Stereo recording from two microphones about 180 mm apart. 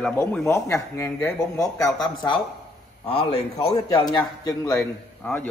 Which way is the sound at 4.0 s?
20° left (ahead or behind).